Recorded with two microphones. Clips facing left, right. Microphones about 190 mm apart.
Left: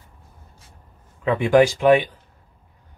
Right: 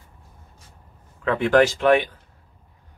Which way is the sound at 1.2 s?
15° left (ahead or behind).